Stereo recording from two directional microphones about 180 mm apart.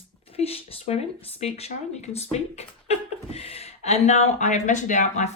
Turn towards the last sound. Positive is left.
turn(degrees=40)  # may be behind; listen again after turning